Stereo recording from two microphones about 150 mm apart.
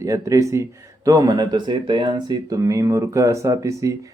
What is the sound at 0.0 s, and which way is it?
Speech, 20° right (ahead or behind).